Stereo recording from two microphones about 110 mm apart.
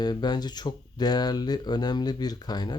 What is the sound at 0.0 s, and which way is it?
Speech, 40° left (ahead or behind).